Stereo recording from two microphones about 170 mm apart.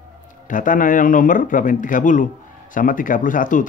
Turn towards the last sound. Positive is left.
turn(degrees=50)  # may be behind; listen again after turning